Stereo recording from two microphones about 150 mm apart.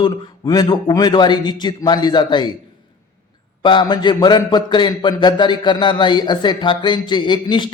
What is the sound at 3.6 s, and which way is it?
A man's voice, 30° left (ahead or behind).